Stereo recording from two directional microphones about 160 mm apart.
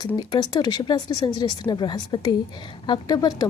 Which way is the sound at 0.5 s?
25° left (ahead or behind).